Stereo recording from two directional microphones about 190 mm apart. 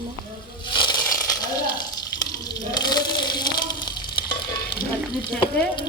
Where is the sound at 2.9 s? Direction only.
20° left (ahead or behind).